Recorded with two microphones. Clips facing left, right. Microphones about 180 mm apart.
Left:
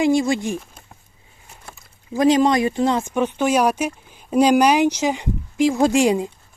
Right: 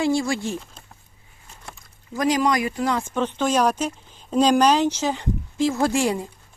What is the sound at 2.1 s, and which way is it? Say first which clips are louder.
Speech: left 5 dB; 25° left (ahead or behind).